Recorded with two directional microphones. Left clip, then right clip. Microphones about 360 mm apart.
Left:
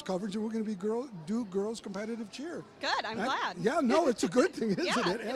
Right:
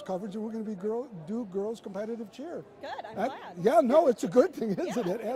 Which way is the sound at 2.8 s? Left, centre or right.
Left.